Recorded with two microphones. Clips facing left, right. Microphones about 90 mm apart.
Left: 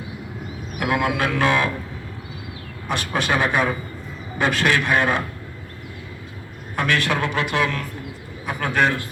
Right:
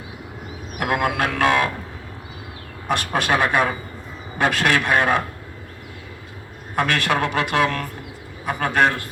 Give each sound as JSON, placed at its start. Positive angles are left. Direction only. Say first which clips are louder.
{"t": 0.8, "sound": "a man's voice", "louder": "even", "side_deg": -50}
{"t": 2.9, "sound": "a man's voice", "louder": "right 2 dB", "side_deg": -50}
{"t": 6.7, "sound": "a man's voice", "louder": "right 1 dB", "side_deg": -55}